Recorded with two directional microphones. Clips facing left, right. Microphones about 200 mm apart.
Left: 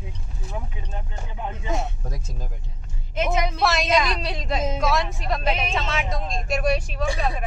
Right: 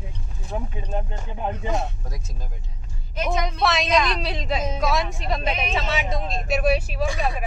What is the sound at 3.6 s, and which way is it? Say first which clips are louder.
Speech: right 1 dB; centre (ahead or behind).